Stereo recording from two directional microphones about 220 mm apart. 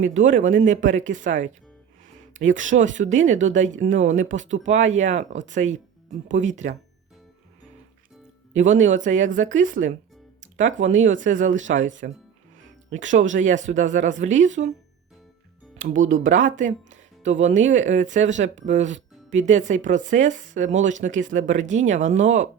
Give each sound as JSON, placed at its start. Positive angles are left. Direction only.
{"t": 0.0, "sound": "speech", "side_deg": -35}
{"t": 8.5, "sound": "speech", "side_deg": -35}
{"t": 13.1, "sound": "speech", "side_deg": -35}
{"t": 15.8, "sound": "speech", "side_deg": -35}